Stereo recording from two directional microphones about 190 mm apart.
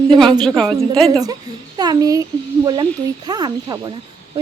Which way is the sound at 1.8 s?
20° right (ahead or behind).